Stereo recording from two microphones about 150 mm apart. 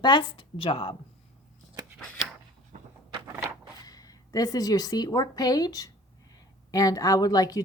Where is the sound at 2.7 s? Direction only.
50° right (ahead or behind).